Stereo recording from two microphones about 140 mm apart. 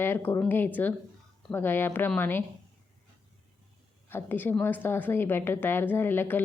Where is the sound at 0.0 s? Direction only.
15° left (ahead or behind).